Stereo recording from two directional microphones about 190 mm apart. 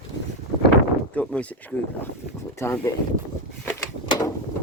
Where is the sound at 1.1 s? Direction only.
5° left (ahead or behind).